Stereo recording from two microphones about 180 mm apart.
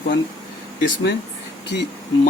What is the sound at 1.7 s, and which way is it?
Speech, 75° left (ahead or behind).